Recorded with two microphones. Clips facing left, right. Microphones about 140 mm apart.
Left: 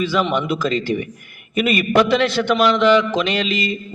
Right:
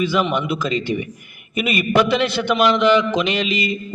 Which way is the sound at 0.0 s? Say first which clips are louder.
Even; 5° right (ahead or behind).